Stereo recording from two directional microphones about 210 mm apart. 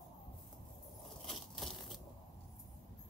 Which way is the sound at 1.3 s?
Centre (ahead or behind).